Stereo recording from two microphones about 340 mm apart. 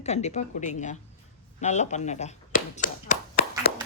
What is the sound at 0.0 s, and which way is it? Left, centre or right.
Speech, centre.